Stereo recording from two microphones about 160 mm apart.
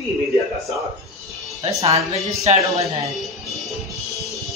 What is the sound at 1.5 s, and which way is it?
Speech, 20° right (ahead or behind).